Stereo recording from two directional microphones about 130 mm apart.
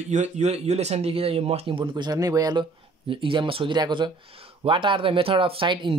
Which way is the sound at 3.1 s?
40° right (ahead or behind).